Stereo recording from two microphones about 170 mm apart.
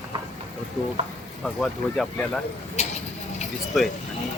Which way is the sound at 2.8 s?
40° left (ahead or behind).